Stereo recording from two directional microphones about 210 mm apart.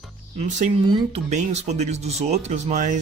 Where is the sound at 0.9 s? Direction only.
30° right (ahead or behind).